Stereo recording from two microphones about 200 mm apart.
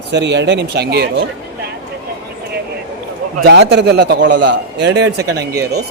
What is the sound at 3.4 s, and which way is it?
A man's voice, 60° right (ahead or behind).